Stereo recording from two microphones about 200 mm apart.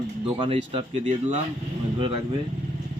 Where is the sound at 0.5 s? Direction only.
35° right (ahead or behind).